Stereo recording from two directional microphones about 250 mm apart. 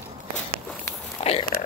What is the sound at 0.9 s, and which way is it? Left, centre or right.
Biting, centre.